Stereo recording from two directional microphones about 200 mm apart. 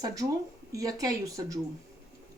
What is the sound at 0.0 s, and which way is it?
Speech, 15° right (ahead or behind).